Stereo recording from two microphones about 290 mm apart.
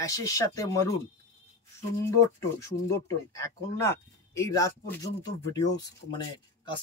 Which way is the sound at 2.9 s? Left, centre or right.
Centre.